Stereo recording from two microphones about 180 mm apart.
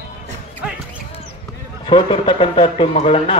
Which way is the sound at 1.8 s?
30° left (ahead or behind).